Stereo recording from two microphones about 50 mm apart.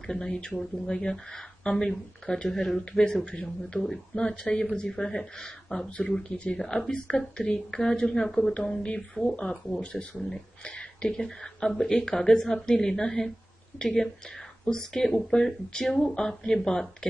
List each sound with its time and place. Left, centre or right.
0.0 s speech: centre
2.8 s speech: centre
3.8 s speech: centre
6.6 s speech: centre
9.9 s speech: right
10.3 s speech: centre